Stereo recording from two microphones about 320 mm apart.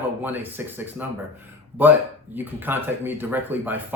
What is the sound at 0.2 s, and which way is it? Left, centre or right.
A man's voice, centre.